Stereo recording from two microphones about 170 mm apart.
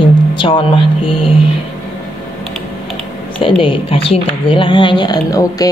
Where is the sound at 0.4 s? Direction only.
30° left (ahead or behind).